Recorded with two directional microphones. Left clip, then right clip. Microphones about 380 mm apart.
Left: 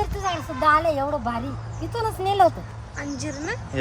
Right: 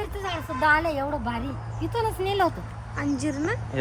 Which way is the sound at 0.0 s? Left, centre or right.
Centre.